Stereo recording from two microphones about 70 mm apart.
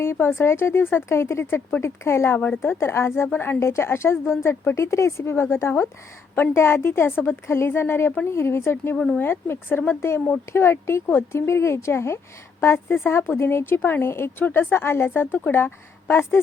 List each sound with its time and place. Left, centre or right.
0.0 s a woman's voice: left